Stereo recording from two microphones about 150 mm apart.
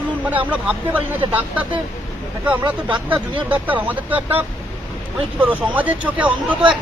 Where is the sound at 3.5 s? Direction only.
10° right (ahead or behind).